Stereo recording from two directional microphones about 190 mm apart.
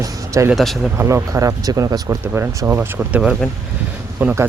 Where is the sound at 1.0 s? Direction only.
15° right (ahead or behind).